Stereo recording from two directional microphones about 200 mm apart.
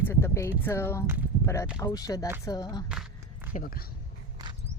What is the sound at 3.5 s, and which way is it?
Speech, 50° left (ahead or behind).